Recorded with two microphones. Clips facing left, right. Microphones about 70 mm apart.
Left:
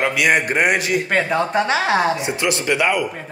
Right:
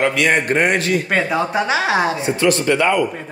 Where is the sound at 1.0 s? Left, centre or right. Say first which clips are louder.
Even; centre.